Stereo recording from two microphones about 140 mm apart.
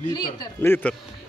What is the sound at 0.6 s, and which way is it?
Speech, 15° left (ahead or behind).